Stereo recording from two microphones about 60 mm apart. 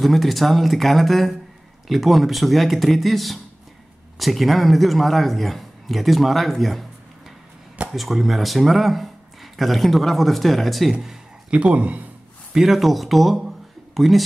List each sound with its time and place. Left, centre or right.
0.0 s a man's voice: centre
7.9 s speech: centre
11.6 s speech: right
12.5 s speech: centre